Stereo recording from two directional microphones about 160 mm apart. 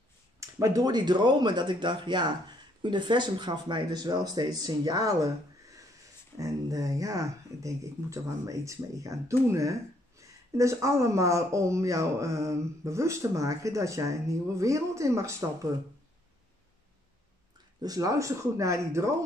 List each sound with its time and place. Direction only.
0.4 s speech: 20° right (ahead or behind)
6.3 s speech: 20° right (ahead or behind)
17.8 s speech: 20° right (ahead or behind)